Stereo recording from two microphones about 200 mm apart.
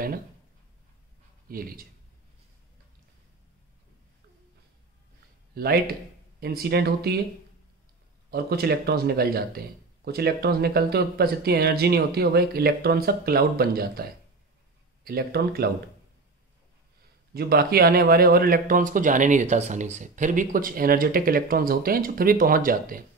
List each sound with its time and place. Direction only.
1.5 s speech: 45° right (ahead or behind)
5.5 s speech: 50° right (ahead or behind)
8.3 s speech: 50° right (ahead or behind)
15.0 s speech: 50° right (ahead or behind)
17.3 s speech: 50° right (ahead or behind)